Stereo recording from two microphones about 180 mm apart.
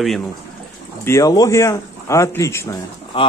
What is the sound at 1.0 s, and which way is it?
Speech, 15° left (ahead or behind).